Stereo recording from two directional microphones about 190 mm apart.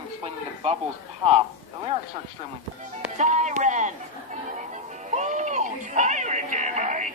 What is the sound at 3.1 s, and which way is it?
Speech, 40° right (ahead or behind).